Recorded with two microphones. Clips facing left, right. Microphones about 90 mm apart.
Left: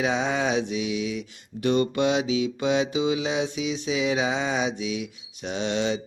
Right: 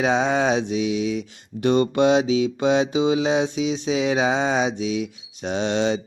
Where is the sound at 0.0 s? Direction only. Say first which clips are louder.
Right 5 dB; 35° right (ahead or behind).